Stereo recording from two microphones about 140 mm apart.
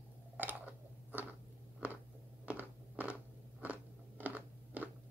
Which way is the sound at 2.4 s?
10° right (ahead or behind).